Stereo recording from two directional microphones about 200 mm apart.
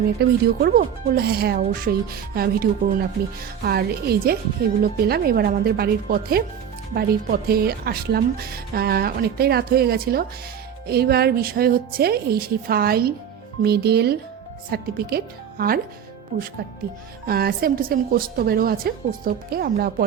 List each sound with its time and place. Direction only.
0.2 s speech: 55° right (ahead or behind)
17.2 s speech: 50° right (ahead or behind)